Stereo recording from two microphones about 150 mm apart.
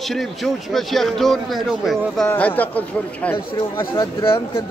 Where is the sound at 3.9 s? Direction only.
35° left (ahead or behind).